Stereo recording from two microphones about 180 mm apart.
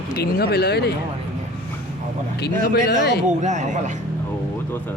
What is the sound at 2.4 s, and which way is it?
Speech, 65° left (ahead or behind).